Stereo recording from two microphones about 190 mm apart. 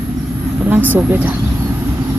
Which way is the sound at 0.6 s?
10° right (ahead or behind).